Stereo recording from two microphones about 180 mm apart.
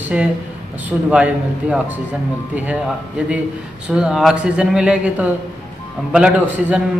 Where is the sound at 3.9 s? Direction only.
5° right (ahead or behind).